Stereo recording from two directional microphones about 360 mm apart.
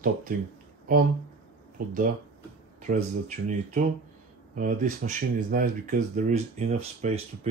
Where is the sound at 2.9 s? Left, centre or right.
Right.